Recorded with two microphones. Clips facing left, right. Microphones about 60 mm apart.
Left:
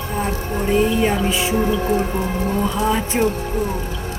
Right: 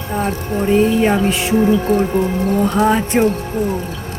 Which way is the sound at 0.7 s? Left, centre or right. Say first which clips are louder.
Right 4 dB; right.